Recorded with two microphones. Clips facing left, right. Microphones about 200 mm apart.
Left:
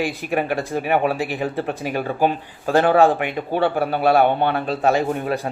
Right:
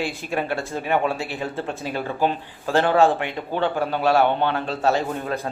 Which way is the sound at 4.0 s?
55° left (ahead or behind).